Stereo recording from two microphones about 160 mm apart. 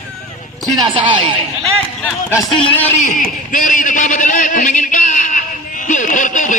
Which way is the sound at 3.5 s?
55° left (ahead or behind).